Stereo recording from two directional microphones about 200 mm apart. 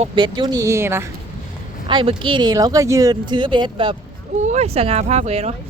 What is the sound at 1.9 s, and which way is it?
Speech, 25° right (ahead or behind).